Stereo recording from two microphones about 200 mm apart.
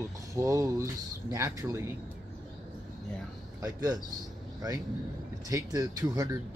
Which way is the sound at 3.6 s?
20° right (ahead or behind).